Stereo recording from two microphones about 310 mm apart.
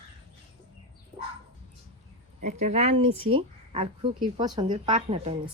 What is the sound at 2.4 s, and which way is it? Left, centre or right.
Speech, right.